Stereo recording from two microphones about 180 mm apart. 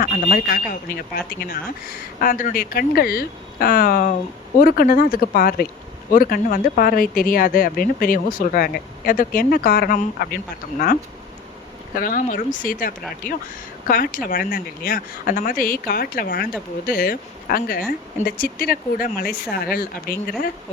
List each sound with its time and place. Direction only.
0.0 s speech: 55° left (ahead or behind)
2.2 s speech: 50° left (ahead or behind)
11.9 s speech: 50° left (ahead or behind)